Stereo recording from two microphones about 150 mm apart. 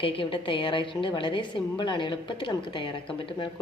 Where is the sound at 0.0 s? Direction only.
35° left (ahead or behind).